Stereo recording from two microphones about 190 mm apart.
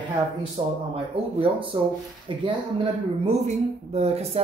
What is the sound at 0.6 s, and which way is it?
Speech, 30° right (ahead or behind).